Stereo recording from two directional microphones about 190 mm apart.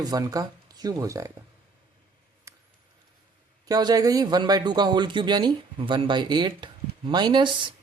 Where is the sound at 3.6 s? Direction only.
20° right (ahead or behind).